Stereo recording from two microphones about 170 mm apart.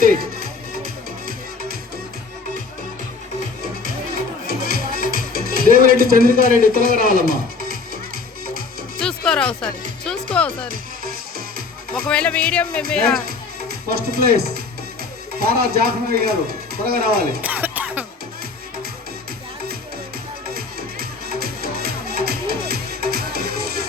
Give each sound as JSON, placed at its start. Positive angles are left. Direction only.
{"t": 4.6, "sound": "music", "side_deg": -60}
{"t": 5.1, "sound": "speech", "side_deg": -60}
{"t": 9.0, "sound": "music", "side_deg": 5}
{"t": 10.0, "sound": "speech", "side_deg": 5}
{"t": 12.0, "sound": "speech", "side_deg": 5}
{"t": 13.2, "sound": "speech", "side_deg": -65}
{"t": 17.4, "sound": "music", "side_deg": -10}
{"t": 20.5, "sound": "music", "side_deg": -65}